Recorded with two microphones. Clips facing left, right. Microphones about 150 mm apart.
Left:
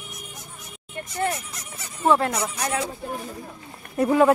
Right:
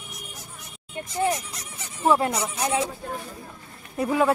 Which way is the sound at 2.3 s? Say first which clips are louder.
Even; 25° right (ahead or behind).